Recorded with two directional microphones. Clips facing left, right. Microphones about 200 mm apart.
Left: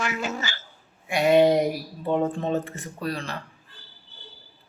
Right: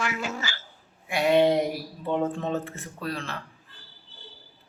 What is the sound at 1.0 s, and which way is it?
Speech, centre (ahead or behind).